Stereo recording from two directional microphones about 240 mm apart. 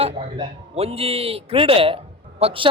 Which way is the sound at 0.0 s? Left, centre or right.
Right.